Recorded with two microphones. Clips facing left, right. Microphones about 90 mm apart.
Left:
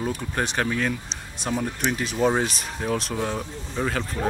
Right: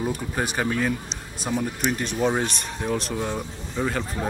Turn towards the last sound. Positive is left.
turn(degrees=0)  # may be behind; listen again after turning